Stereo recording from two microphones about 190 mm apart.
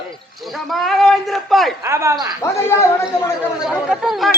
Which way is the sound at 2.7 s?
15° left (ahead or behind).